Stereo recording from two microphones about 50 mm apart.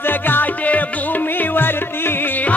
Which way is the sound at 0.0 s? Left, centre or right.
Left.